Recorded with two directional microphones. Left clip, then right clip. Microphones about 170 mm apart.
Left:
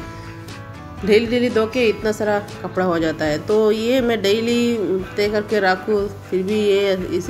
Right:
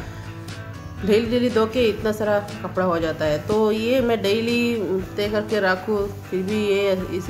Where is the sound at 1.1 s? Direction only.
15° left (ahead or behind).